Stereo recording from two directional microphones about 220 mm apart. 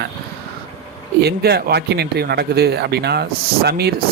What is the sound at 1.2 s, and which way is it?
Speech, 45° right (ahead or behind).